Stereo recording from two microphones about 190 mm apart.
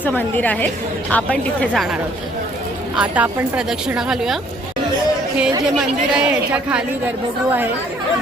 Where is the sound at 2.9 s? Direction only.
10° right (ahead or behind).